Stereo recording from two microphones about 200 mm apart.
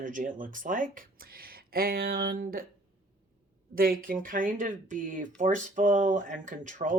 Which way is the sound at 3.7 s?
45° right (ahead or behind).